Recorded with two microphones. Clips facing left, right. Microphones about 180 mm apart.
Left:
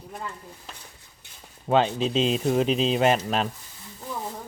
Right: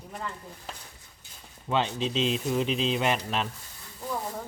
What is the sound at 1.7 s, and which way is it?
Speech, 45° left (ahead or behind).